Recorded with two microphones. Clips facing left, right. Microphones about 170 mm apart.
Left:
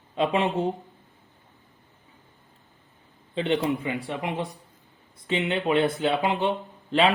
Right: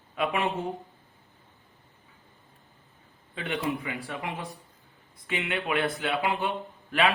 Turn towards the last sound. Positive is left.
turn(degrees=25)  # may be behind; listen again after turning